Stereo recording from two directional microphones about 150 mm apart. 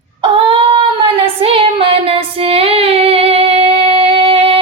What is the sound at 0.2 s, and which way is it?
Child singing, 40° right (ahead or behind).